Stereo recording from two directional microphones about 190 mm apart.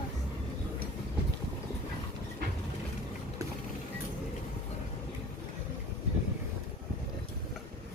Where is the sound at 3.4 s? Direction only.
15° right (ahead or behind).